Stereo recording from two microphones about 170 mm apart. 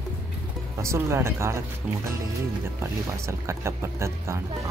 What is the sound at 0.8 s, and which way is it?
Speech, 15° right (ahead or behind).